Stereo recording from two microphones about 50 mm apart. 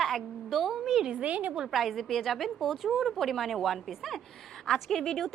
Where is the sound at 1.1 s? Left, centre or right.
Right.